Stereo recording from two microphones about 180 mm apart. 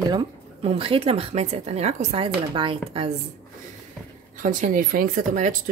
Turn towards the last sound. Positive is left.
turn(degrees=-45)  # may be behind; listen again after turning